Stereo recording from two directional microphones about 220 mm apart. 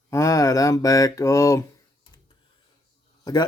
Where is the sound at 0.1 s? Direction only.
15° left (ahead or behind).